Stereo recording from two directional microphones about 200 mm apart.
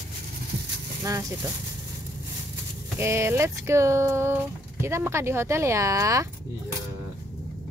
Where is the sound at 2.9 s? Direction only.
15° right (ahead or behind).